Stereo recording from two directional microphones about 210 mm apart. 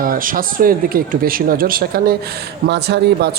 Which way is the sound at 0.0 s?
40° right (ahead or behind).